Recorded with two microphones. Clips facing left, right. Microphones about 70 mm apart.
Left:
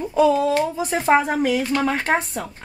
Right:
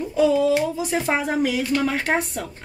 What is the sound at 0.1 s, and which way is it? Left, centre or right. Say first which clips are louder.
A woman's voice: left 1 dB; left.